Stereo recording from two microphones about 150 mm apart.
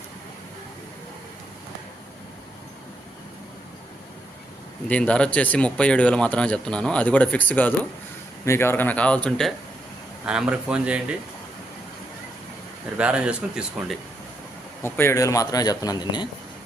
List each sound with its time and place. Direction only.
4.9 s speech: 10° left (ahead or behind)
10.2 s speech: 5° right (ahead or behind)
13.0 s speech: 5° right (ahead or behind)
14.8 s a man's voice: 15° left (ahead or behind)